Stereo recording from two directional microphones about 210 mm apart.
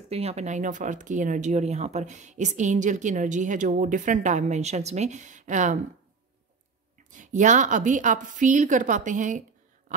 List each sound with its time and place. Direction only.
0.1 s speech: 30° right (ahead or behind)
7.1 s speech: 35° right (ahead or behind)